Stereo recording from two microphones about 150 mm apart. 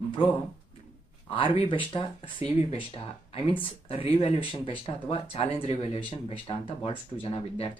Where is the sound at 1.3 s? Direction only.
35° left (ahead or behind).